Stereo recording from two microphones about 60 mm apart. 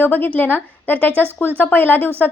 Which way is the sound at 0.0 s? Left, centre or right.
Left.